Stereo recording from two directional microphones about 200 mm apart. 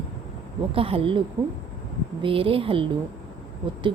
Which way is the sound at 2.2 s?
25° right (ahead or behind).